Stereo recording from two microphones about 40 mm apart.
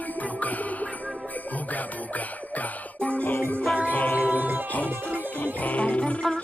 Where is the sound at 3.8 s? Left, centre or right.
Left.